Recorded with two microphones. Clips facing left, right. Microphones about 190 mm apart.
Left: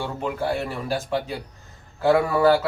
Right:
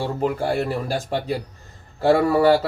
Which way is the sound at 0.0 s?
35° right (ahead or behind).